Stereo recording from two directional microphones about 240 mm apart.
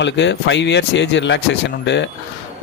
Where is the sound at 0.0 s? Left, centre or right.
Left.